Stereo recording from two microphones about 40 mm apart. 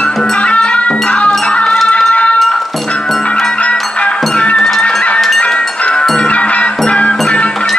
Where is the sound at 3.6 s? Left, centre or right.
Left.